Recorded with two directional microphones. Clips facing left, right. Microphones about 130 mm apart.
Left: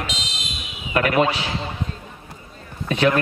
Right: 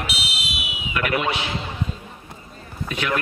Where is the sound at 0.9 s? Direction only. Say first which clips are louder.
Left 5 dB; 35° left (ahead or behind).